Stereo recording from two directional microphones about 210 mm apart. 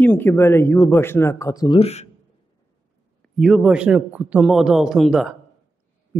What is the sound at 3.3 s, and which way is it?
A man's voice, centre (ahead or behind).